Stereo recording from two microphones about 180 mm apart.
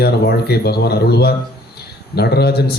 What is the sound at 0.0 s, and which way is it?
Speech, 60° left (ahead or behind).